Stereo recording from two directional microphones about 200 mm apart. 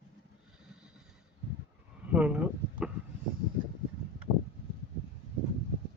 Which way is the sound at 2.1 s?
5° right (ahead or behind).